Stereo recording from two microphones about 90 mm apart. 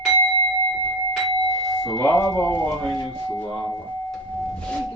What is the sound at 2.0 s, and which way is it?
Speech, 30° left (ahead or behind).